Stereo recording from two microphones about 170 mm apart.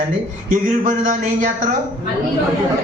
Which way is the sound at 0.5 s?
50° right (ahead or behind).